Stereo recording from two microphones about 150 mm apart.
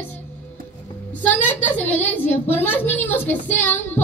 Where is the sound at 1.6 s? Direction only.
10° left (ahead or behind).